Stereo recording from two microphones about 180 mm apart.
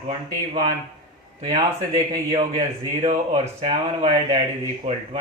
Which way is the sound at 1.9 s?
25° right (ahead or behind).